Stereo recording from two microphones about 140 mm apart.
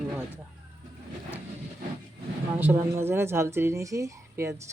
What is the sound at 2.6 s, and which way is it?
A woman's voice, 15° right (ahead or behind).